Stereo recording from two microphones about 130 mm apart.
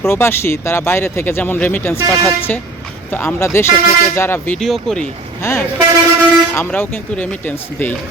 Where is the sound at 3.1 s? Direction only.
15° left (ahead or behind).